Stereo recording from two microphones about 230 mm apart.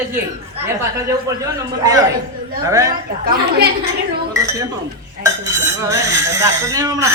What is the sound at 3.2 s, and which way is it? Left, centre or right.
Speech, right.